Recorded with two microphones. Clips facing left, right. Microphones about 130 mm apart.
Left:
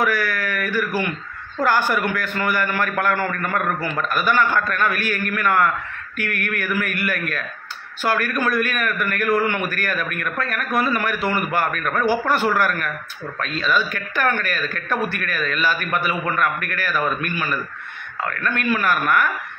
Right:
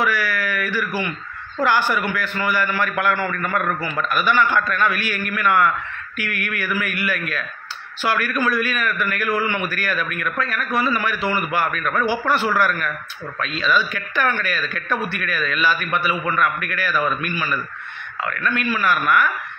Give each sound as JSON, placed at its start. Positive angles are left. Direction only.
{"t": 0.0, "sound": "speech", "side_deg": 50}